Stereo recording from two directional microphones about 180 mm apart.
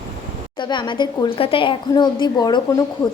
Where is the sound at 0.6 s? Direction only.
25° left (ahead or behind).